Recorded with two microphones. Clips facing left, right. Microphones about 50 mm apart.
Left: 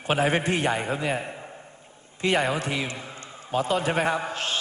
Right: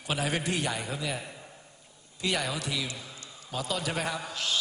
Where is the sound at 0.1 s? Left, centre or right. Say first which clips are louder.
Left 7 dB; left.